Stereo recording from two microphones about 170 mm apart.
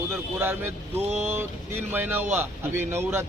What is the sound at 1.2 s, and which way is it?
Speech, 15° right (ahead or behind).